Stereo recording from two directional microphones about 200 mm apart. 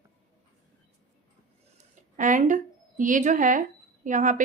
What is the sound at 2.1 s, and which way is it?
A woman's voice, 40° right (ahead or behind).